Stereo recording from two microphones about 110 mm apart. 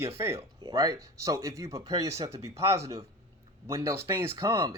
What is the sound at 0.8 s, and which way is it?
Speech, 30° right (ahead or behind).